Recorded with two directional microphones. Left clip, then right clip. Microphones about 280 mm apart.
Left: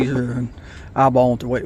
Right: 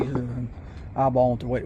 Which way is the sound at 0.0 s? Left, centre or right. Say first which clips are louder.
Left 7 dB; left.